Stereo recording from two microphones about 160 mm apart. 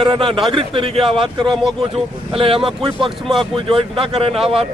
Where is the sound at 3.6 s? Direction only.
35° right (ahead or behind).